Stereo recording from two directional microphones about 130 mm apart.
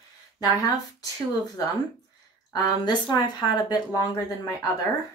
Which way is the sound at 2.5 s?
30° left (ahead or behind).